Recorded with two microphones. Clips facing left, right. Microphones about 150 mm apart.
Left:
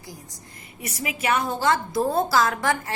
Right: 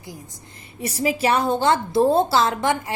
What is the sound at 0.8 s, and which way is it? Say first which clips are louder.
A woman's voice: right 9 dB; 30° right (ahead or behind).